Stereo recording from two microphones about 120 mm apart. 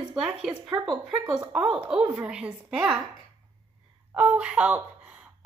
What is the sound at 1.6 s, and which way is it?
Speech, 50° right (ahead or behind).